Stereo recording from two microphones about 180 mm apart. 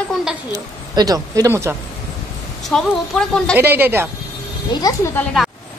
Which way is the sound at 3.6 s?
10° right (ahead or behind).